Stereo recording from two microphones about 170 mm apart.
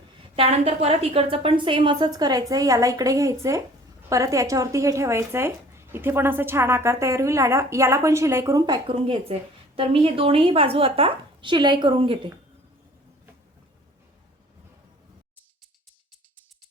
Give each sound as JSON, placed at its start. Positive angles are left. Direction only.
{"t": 0.3, "sound": "a woman's voice", "side_deg": -35}